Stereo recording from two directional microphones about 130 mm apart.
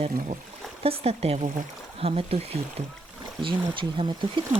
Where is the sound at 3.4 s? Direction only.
40° right (ahead or behind).